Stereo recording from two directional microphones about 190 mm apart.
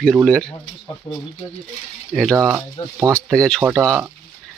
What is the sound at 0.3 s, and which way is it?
Speech, 5° left (ahead or behind).